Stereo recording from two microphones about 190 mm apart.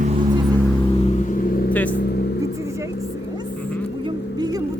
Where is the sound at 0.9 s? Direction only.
35° left (ahead or behind).